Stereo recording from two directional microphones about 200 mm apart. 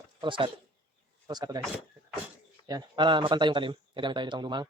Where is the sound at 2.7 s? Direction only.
20° right (ahead or behind).